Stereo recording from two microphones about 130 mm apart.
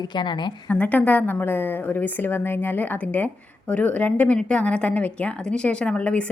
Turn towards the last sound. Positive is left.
turn(degrees=10)  # may be behind; listen again after turning